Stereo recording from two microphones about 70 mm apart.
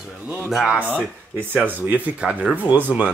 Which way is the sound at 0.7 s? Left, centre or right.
Right.